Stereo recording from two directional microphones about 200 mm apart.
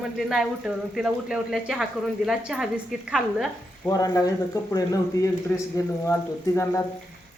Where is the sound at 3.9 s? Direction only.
20° left (ahead or behind).